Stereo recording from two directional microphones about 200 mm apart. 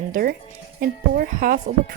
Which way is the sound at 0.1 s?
50° right (ahead or behind).